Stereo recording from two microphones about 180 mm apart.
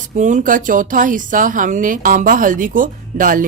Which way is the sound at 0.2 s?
45° right (ahead or behind).